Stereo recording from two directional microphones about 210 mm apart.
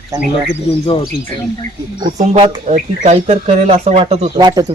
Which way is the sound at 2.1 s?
30° right (ahead or behind).